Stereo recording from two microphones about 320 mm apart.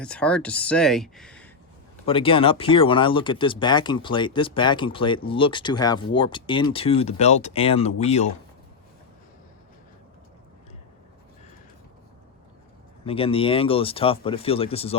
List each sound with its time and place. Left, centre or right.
0.0 s speech: centre
2.0 s speech: centre
13.1 s speech: centre